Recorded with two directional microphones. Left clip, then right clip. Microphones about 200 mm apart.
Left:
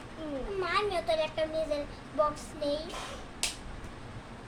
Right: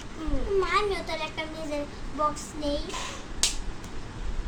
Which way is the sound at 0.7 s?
25° left (ahead or behind).